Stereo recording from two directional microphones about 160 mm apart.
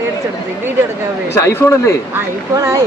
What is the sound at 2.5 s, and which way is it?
Speech, 20° right (ahead or behind).